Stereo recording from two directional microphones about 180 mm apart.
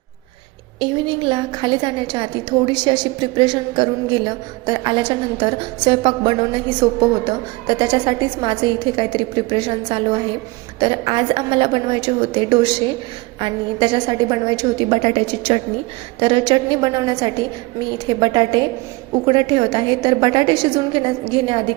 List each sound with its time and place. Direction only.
0.8 s a woman's voice: 25° right (ahead or behind)